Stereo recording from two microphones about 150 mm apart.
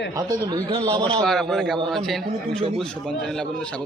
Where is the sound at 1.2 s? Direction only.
Centre (ahead or behind).